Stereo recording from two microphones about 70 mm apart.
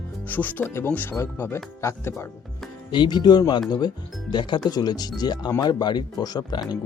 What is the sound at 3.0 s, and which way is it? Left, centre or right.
Speech, left.